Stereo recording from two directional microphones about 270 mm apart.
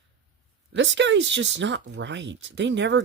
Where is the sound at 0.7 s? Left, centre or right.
Right.